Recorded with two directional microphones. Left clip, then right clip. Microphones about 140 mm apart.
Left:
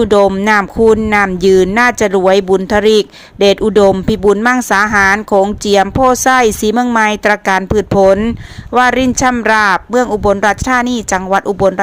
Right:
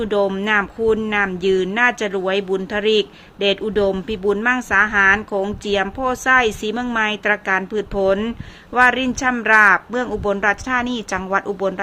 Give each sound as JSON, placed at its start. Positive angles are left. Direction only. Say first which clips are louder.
{"t": 0.8, "sound": "speech", "louder": "left 9 dB", "side_deg": 50}
{"t": 8.2, "sound": "speech", "louder": "left 8 dB", "side_deg": 35}